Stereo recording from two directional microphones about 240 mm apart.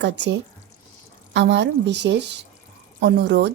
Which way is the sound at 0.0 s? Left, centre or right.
Right.